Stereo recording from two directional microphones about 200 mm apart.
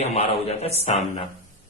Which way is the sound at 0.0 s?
30° left (ahead or behind).